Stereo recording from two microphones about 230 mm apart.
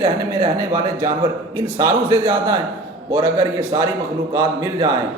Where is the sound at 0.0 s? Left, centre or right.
Centre.